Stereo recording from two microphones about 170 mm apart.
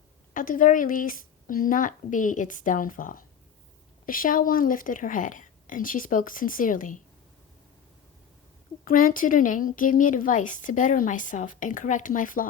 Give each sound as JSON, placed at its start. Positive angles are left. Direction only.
{"t": 0.3, "sound": "speech", "side_deg": 50}
{"t": 8.8, "sound": "speech", "side_deg": 55}